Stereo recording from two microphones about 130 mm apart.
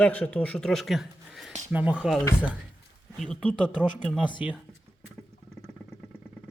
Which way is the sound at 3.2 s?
10° left (ahead or behind).